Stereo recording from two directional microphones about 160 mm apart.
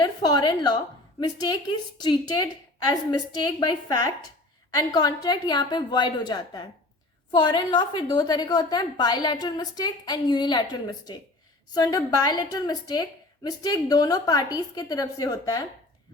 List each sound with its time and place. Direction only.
0.0 s a woman's voice: 25° left (ahead or behind)